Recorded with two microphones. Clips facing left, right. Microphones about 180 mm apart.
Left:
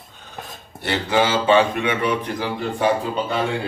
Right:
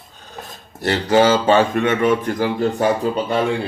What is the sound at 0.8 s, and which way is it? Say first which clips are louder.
Speech: right 5 dB; 40° right (ahead or behind).